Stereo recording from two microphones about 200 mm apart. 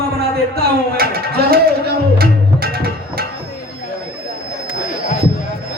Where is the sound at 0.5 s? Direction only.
50° right (ahead or behind).